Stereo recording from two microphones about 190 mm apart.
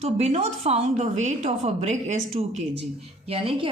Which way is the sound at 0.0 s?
35° right (ahead or behind).